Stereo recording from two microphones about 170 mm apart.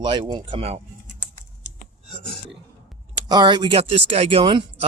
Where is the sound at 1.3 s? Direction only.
45° right (ahead or behind).